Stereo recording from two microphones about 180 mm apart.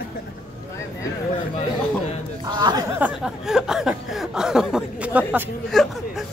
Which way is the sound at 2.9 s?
5° right (ahead or behind).